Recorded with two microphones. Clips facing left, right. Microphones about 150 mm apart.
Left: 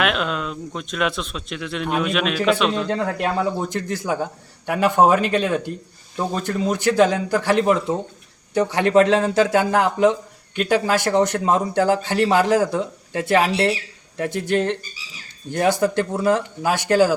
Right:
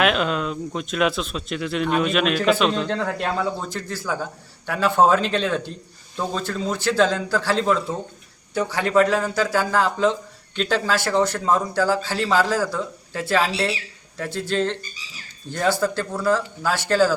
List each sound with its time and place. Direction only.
0.0 s speech: centre (ahead or behind)
2.9 s a man's voice: 15° left (ahead or behind)